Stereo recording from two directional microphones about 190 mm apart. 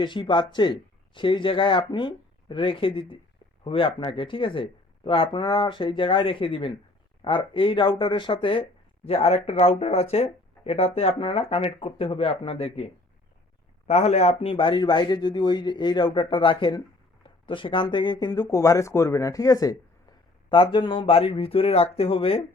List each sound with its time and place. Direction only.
0.0 s speech: 25° left (ahead or behind)